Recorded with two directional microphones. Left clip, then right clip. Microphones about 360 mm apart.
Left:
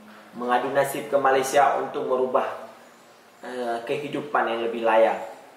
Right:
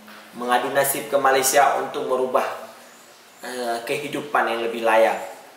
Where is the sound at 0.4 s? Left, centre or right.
Centre.